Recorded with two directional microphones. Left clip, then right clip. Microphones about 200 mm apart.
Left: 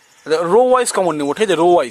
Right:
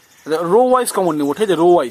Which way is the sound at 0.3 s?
30° left (ahead or behind).